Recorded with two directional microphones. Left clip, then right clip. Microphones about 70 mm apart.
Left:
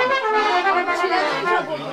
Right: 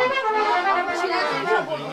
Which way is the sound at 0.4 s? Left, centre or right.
Left.